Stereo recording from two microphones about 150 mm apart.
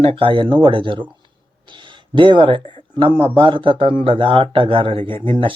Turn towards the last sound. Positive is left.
turn(degrees=-35)  # may be behind; listen again after turning